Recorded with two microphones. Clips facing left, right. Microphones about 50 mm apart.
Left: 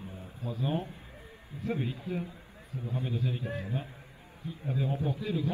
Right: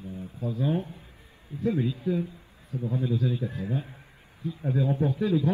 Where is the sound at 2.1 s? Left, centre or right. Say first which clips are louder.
Right 9 dB; right.